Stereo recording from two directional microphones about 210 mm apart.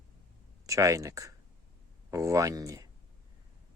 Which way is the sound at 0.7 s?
15° right (ahead or behind).